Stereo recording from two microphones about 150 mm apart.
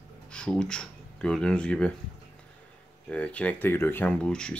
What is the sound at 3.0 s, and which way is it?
Speech, 10° left (ahead or behind).